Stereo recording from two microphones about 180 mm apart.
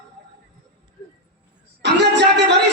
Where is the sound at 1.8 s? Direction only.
75° right (ahead or behind).